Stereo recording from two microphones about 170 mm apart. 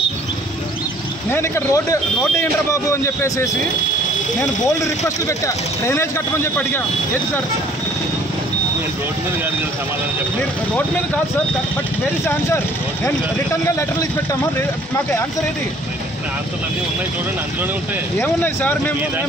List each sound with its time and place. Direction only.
1.3 s speech: 15° left (ahead or behind)
5.9 s speech: 15° left (ahead or behind)
12.3 s speech: 15° left (ahead or behind)
18.2 s speech: 10° left (ahead or behind)